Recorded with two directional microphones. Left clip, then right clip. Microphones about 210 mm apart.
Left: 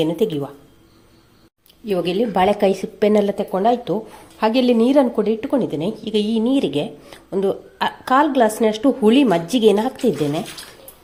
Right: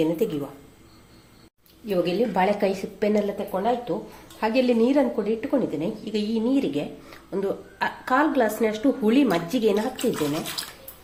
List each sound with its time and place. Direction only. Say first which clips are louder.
0.0 s a woman's voice: left 4 dB; 40° left (ahead or behind)
1.9 s a woman's voice: left 4 dB; 40° left (ahead or behind)
4.4 s a woman's voice: left 5 dB; 40° left (ahead or behind)